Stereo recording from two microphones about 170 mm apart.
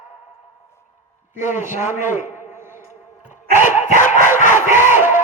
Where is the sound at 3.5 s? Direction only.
45° left (ahead or behind).